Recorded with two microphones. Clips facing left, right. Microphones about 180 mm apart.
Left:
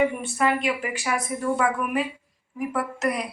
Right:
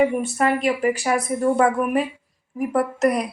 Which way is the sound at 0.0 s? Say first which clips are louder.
Right 4 dB; 40° right (ahead or behind).